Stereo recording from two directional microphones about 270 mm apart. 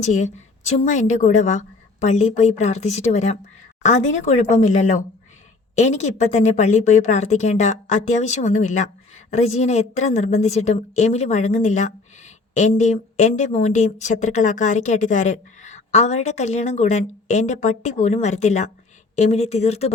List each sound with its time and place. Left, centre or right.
0.0 s a woman's voice: left